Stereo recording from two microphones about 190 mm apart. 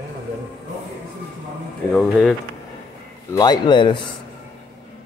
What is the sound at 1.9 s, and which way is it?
Speech, 5° left (ahead or behind).